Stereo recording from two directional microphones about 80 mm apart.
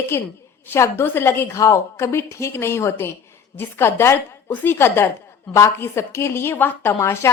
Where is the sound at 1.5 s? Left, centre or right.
Left.